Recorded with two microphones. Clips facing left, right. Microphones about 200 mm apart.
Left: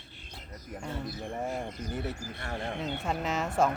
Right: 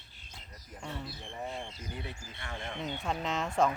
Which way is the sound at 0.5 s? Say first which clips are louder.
Left 4 dB; 60° left (ahead or behind).